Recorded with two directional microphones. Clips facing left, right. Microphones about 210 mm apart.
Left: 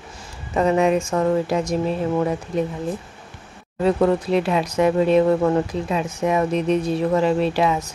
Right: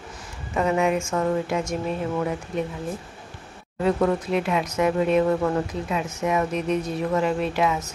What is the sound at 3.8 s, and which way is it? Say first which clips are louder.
Speech: left 4 dB; 30° left (ahead or behind).